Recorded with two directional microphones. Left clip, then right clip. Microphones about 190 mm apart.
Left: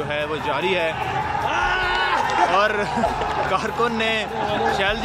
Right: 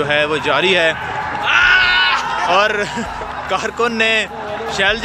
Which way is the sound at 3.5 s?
Centre (ahead or behind).